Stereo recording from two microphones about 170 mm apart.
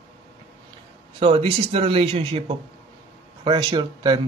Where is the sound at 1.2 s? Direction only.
30° right (ahead or behind).